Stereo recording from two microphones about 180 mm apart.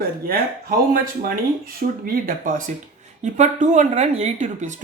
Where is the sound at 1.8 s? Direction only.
60° right (ahead or behind).